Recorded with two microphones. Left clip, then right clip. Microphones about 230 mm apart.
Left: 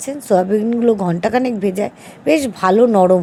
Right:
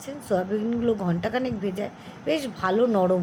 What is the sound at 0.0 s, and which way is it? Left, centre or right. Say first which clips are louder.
A woman's voice: left 11 dB; left.